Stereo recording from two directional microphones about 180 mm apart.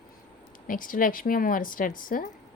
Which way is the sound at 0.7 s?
50° left (ahead or behind).